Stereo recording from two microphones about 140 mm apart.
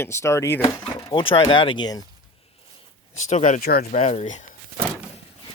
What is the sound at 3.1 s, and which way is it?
Speech, 55° left (ahead or behind).